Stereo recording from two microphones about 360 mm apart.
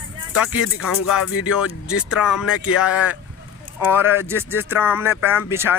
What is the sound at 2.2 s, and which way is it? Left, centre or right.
Speech, centre.